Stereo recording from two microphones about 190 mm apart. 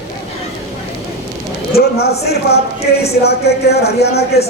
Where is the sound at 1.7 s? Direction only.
55° left (ahead or behind).